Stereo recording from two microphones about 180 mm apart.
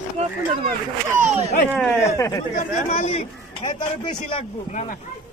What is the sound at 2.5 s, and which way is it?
Speech, 40° left (ahead or behind).